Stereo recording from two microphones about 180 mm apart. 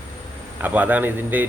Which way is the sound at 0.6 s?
10° right (ahead or behind).